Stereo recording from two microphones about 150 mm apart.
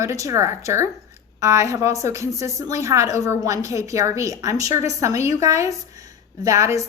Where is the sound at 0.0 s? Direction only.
20° right (ahead or behind).